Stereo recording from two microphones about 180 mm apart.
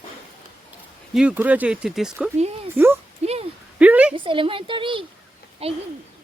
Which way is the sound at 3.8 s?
5° right (ahead or behind).